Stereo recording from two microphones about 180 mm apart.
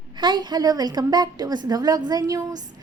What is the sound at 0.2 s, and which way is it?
A woman's voice, 25° right (ahead or behind).